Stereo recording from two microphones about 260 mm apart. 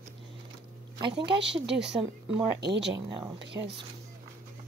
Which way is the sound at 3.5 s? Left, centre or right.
Centre.